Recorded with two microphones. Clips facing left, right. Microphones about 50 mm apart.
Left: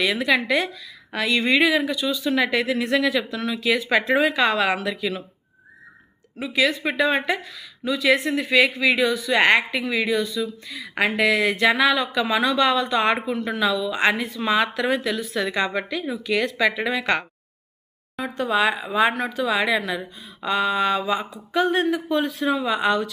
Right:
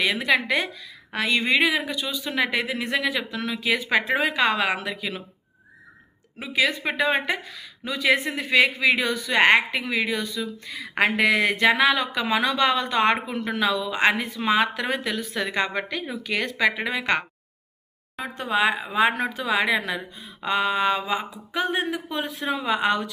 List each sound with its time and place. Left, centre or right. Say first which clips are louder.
0.0 s speech: left 1 dB; right
6.3 s a woman's voice: left 2 dB; right
17.0 s speech: right 1 dB; centre
18.3 s speech: left 1 dB; right
19.1 s speech: left 1 dB; right